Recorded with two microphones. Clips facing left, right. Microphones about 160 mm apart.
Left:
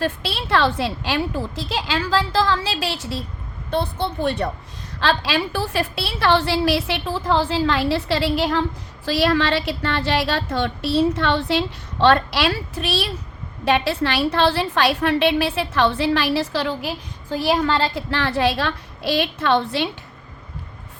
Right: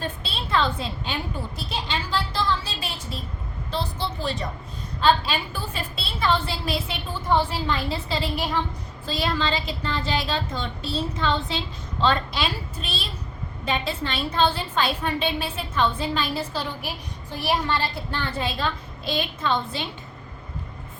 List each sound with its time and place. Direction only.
0.0 s a woman's voice: 80° left
3.7 s a woman's voice: 55° left (ahead or behind)
4.9 s a woman's voice: 90° left; by 19.9 s 75° left (ahead or behind)